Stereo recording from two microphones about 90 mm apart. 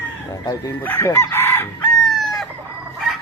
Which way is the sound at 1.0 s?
35° left (ahead or behind).